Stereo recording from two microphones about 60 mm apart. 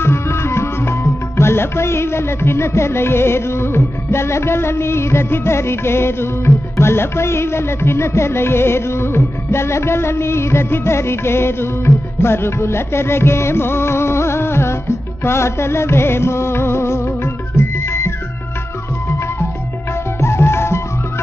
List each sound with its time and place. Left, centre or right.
0.0 s music: left
20.2 s music: left